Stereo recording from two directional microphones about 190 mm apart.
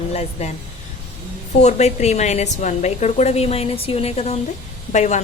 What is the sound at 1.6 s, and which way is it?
Speech, 35° left (ahead or behind).